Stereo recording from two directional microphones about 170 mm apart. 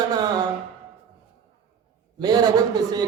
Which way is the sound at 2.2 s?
25° right (ahead or behind).